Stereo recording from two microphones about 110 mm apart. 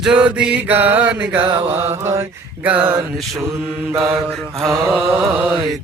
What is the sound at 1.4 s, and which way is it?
Mantra, 50° right (ahead or behind).